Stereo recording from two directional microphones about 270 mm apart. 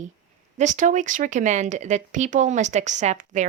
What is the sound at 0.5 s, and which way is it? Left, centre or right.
Speech, right.